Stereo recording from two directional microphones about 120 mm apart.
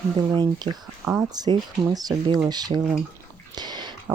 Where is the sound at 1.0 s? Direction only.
15° right (ahead or behind).